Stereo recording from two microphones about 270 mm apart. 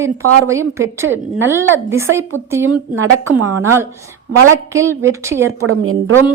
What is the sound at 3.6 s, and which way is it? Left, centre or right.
A woman's voice, centre.